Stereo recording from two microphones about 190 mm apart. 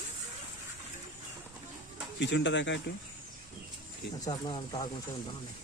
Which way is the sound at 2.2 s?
70° left (ahead or behind).